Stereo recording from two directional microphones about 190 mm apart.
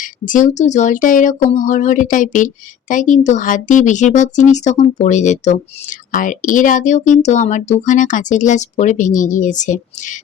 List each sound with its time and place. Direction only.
0.0 s speech: 45° left (ahead or behind)